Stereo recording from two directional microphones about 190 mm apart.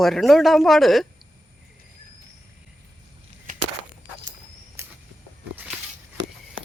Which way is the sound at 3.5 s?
45° right (ahead or behind).